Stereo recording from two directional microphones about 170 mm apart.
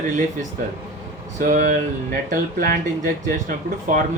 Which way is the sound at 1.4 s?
55° right (ahead or behind).